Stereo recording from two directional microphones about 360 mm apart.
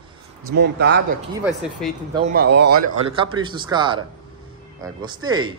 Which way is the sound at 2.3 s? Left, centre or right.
Right.